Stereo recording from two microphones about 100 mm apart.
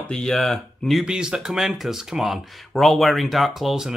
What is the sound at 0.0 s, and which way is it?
Speech, 10° left (ahead or behind).